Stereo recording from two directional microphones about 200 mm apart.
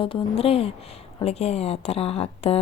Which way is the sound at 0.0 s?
25° left (ahead or behind).